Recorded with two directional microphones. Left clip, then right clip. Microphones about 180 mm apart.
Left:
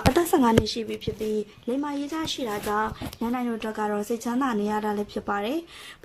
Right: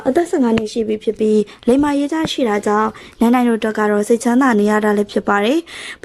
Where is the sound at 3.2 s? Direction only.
60° right (ahead or behind).